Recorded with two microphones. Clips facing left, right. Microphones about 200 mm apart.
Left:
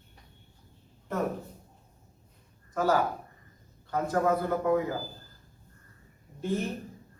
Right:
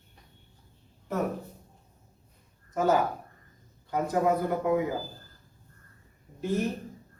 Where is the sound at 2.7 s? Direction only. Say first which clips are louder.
Right 1 dB; 20° right (ahead or behind).